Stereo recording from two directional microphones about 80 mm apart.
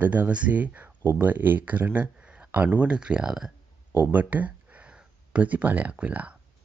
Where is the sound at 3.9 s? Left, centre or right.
Right.